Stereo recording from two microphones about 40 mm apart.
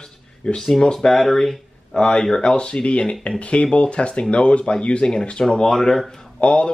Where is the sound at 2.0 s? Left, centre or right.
Centre.